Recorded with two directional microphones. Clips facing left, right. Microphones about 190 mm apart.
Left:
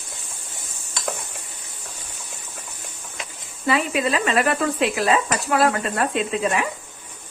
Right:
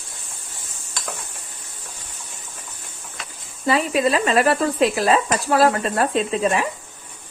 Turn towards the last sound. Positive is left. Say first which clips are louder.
# right 2 dB
turn(degrees=-35)  # may be behind; listen again after turning